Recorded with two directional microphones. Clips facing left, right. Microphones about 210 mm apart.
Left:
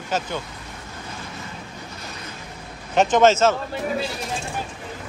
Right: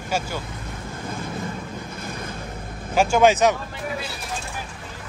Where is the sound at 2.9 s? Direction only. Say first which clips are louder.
Left 1 dB; 10° right (ahead or behind).